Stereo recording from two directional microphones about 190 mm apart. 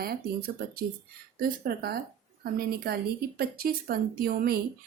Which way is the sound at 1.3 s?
50° right (ahead or behind).